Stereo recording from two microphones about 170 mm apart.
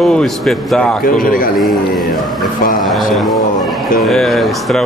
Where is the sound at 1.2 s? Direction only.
55° left (ahead or behind).